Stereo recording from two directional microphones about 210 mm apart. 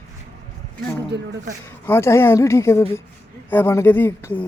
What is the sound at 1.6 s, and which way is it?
Speech, 10° left (ahead or behind).